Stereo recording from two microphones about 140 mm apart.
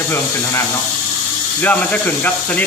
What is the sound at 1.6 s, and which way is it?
Speech, 10° left (ahead or behind).